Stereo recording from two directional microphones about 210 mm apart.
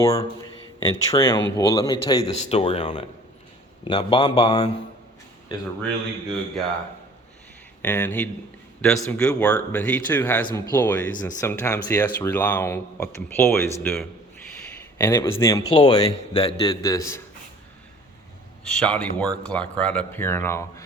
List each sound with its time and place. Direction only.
0.0 s speech: 15° left (ahead or behind)
7.8 s speech: 10° left (ahead or behind)
18.7 s speech: 5° left (ahead or behind)